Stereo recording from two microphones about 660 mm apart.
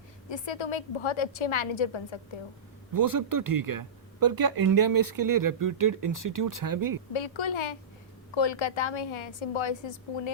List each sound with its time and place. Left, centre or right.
0.3 s a woman's voice: left
2.9 s speech: right
7.1 s a woman's voice: left